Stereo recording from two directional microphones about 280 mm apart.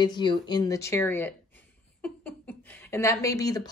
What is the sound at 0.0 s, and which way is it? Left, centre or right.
A woman's voice, centre.